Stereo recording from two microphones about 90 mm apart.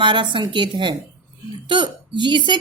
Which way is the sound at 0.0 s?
65° right (ahead or behind).